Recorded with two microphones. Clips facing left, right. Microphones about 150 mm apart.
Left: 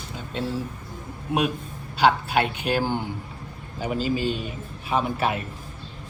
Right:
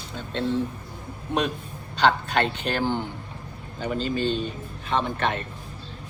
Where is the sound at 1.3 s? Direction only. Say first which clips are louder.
Left 2 dB; 10° left (ahead or behind).